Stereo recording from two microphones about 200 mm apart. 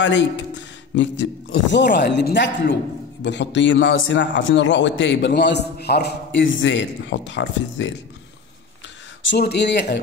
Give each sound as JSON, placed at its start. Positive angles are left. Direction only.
{"t": 0.0, "sound": "a man's voice", "side_deg": 65}
{"t": 9.2, "sound": "a man's voice", "side_deg": 60}